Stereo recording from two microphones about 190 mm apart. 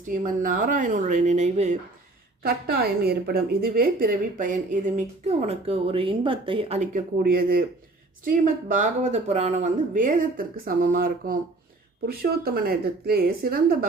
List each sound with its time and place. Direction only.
0.0 s a woman's voice: 45° right (ahead or behind)
2.4 s a woman's voice: 55° right (ahead or behind); by 6.8 s 30° right (ahead or behind)
6.9 s speech: 50° right (ahead or behind)